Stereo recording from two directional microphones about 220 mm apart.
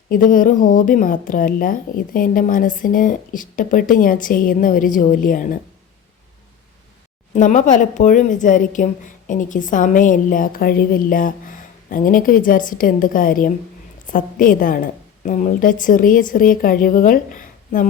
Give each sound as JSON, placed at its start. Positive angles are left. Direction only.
{"t": 0.1, "sound": "a woman's voice", "side_deg": 40}
{"t": 7.3, "sound": "a woman's voice", "side_deg": 35}